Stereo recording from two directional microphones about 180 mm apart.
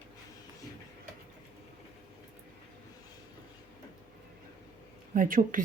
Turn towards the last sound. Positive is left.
turn(degrees=-50)  # may be behind; listen again after turning